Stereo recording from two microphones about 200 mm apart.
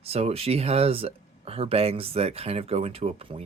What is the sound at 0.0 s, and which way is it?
Speech, 30° right (ahead or behind).